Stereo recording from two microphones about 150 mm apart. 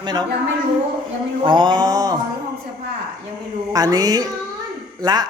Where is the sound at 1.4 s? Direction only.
30° right (ahead or behind).